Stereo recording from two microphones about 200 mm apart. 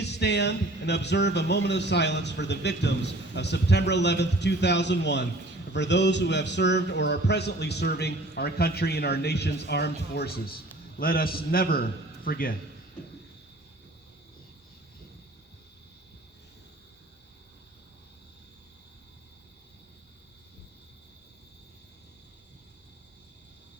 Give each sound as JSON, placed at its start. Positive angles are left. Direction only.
{"t": 0.0, "sound": "a man's voice", "side_deg": 60}